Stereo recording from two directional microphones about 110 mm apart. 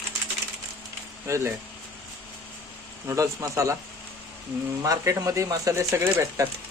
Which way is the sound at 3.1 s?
30° right (ahead or behind).